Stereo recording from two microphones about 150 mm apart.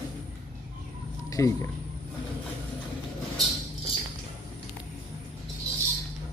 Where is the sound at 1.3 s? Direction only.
20° left (ahead or behind).